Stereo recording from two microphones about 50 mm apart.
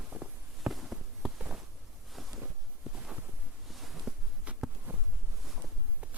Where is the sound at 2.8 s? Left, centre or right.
Centre.